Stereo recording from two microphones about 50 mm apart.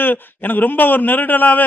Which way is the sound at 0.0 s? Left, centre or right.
Left.